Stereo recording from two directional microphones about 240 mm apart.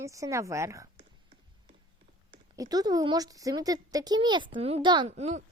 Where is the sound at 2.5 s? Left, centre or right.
Centre.